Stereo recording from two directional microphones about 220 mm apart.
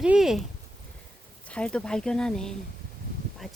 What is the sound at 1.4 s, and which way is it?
Speech, 5° left (ahead or behind).